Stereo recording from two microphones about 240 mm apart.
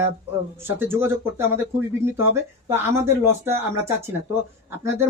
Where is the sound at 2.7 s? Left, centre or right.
Centre.